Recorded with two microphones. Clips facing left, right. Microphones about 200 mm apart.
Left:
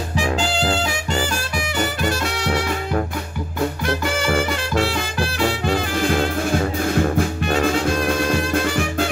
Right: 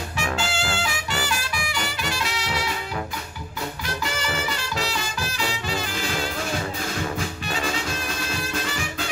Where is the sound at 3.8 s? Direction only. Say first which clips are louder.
Left 6 dB; 55° left (ahead or behind).